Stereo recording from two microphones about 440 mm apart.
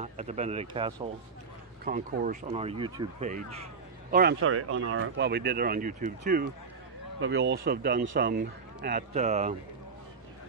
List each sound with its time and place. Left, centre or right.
0.0 s speech: centre